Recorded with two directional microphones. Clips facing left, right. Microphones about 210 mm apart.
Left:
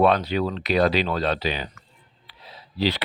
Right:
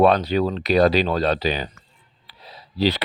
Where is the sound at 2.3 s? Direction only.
40° right (ahead or behind).